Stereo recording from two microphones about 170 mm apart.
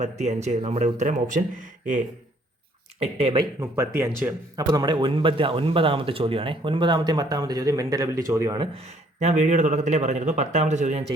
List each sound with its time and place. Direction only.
0.0 s a man's voice: 40° right (ahead or behind)
3.0 s speech: 35° right (ahead or behind)
3.6 s speech: 15° right (ahead or behind)
4.7 s a man's voice: 25° right (ahead or behind); by 11.0 s 45° right (ahead or behind)